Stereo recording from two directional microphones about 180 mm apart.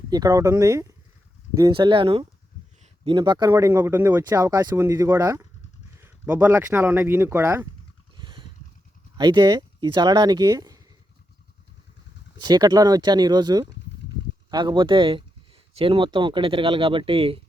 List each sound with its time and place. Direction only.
0.1 s speech: 20° right (ahead or behind)
8.1 s a sound: 25° right (ahead or behind)
9.1 s speech: 25° right (ahead or behind)
12.4 s speech: 20° right (ahead or behind)